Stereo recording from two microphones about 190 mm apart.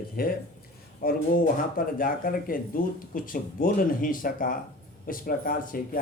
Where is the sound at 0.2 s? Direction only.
50° left (ahead or behind).